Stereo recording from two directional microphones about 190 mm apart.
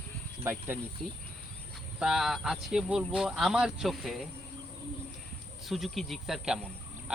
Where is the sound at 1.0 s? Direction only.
5° left (ahead or behind).